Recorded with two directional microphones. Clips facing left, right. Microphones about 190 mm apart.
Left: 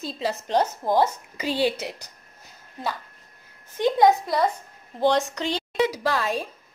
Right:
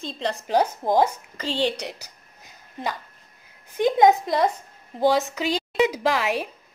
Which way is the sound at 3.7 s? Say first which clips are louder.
Right 1 dB; 15° right (ahead or behind).